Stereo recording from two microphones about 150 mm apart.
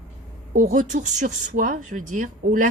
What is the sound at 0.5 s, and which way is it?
Speech, 65° right (ahead or behind).